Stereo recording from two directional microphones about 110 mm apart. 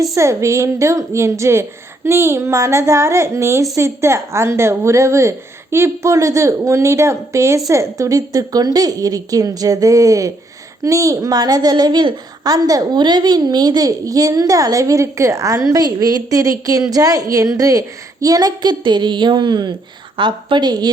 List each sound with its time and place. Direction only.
0.2 s a woman's voice: 25° right (ahead or behind)